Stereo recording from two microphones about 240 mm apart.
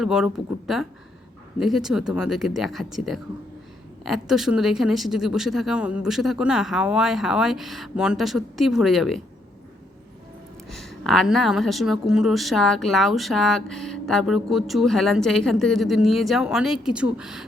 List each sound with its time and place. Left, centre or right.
0.0 s a woman's voice: centre
10.7 s a woman's voice: centre